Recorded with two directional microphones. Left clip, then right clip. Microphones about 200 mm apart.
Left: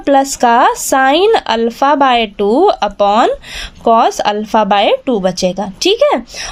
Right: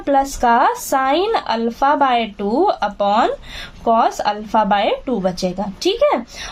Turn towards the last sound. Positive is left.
turn(degrees=40)  # may be behind; listen again after turning